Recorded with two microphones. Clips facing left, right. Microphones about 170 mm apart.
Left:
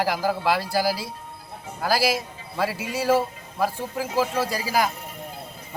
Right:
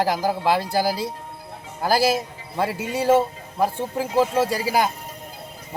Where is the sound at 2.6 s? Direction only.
20° right (ahead or behind).